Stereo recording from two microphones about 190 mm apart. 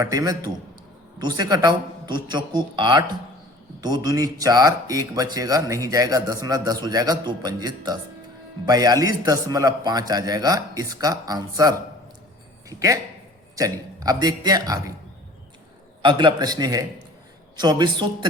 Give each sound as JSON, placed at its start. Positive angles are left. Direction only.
{"t": 0.0, "sound": "speech", "side_deg": -20}
{"t": 16.0, "sound": "speech", "side_deg": -25}